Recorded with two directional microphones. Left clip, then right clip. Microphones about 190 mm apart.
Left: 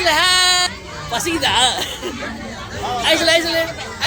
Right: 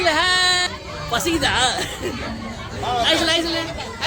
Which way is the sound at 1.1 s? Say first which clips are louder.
Left 2 dB; 20° right (ahead or behind).